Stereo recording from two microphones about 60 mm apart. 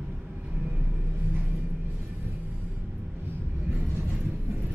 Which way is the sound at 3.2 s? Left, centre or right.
Right.